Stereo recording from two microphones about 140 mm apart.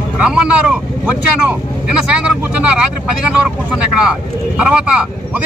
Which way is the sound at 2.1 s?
10° right (ahead or behind).